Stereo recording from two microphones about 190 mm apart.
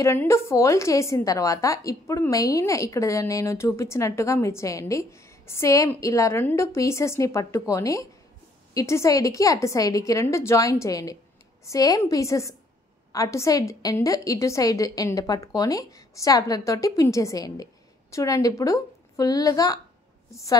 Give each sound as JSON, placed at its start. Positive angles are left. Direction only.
{"t": 0.0, "sound": "a woman's voice", "side_deg": 15}